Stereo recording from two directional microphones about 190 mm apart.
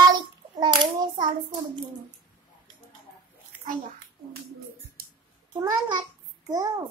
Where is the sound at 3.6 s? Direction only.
50° right (ahead or behind).